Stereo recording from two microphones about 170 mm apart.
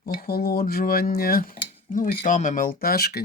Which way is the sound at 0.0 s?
50° left (ahead or behind).